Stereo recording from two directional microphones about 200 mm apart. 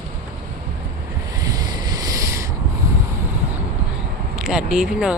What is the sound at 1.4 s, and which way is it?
Rub, 20° right (ahead or behind).